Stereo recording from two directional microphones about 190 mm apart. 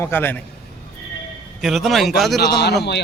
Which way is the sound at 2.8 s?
60° left (ahead or behind).